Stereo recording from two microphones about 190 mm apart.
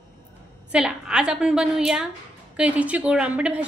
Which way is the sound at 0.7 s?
5° right (ahead or behind).